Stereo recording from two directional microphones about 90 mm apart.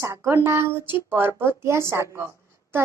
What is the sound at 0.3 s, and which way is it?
A woman's voice, 25° right (ahead or behind).